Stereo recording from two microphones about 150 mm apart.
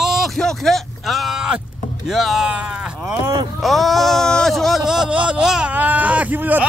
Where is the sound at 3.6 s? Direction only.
Centre (ahead or behind).